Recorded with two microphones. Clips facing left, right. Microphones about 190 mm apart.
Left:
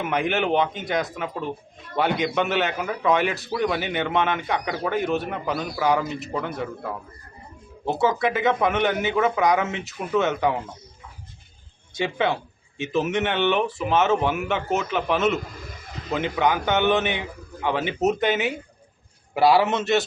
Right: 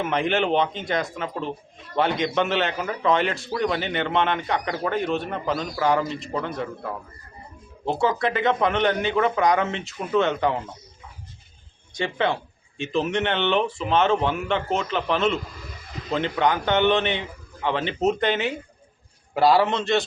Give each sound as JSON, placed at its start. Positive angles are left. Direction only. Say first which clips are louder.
{"t": 0.0, "sound": "a man's voice", "louder": "right 1 dB", "side_deg": 5}
{"t": 7.9, "sound": "a man's voice", "louder": "left 1 dB", "side_deg": 5}
{"t": 11.9, "sound": "a man's voice", "louder": "left 1 dB", "side_deg": 5}